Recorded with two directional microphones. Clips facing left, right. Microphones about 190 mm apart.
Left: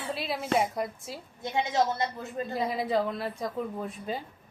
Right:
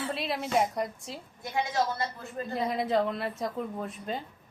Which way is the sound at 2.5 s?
Centre (ahead or behind).